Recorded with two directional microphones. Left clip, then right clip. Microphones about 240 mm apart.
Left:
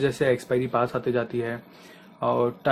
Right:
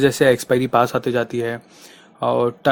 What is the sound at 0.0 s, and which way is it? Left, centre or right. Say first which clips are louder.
A man's voice: right 8 dB; right.